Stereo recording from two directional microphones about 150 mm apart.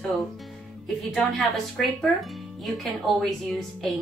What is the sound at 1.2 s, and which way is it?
Speech, centre (ahead or behind).